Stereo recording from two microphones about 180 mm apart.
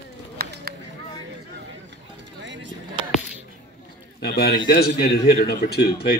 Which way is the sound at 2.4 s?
90° right.